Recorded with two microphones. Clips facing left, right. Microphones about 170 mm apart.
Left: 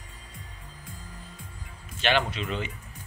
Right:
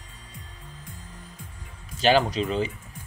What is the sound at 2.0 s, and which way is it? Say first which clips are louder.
Speech: right 6 dB; 35° right (ahead or behind).